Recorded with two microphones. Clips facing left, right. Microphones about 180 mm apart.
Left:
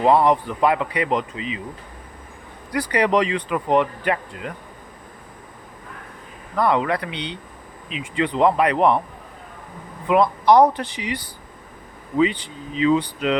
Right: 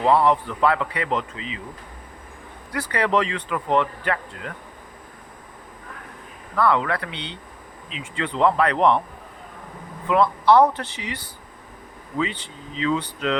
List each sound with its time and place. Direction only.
0.0 s speech: 15° left (ahead or behind)
2.7 s speech: 15° left (ahead or behind)
6.6 s speech: 20° left (ahead or behind)
10.1 s speech: 15° left (ahead or behind)